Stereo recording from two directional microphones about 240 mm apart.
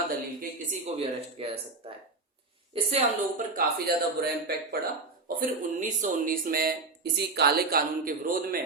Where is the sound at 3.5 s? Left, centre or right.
Right.